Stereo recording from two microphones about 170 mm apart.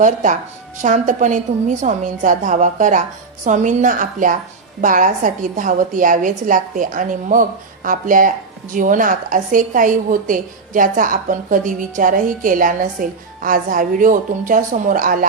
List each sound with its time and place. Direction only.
0.0 s a woman's voice: 45° right (ahead or behind)